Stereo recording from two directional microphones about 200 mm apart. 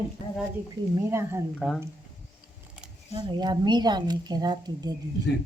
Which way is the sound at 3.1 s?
25° right (ahead or behind).